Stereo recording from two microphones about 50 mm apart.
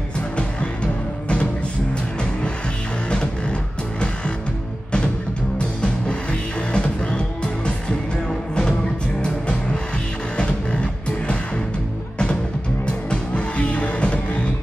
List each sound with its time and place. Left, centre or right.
5.6 s music: left
9.2 s music: centre
12.8 s music: left